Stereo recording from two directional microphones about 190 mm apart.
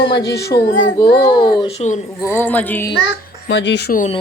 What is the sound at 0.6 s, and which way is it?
Speech, 55° left (ahead or behind).